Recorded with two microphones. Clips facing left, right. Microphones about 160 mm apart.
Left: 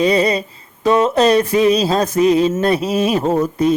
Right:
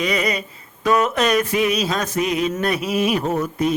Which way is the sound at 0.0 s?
30° left (ahead or behind).